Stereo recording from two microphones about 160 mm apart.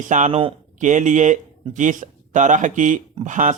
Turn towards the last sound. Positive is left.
turn(degrees=-50)  # may be behind; listen again after turning